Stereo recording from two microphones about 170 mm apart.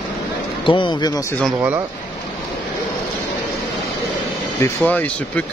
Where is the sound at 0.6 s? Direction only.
30° left (ahead or behind).